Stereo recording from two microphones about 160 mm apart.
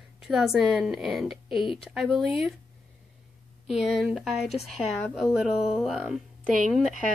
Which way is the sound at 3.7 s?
5° right (ahead or behind).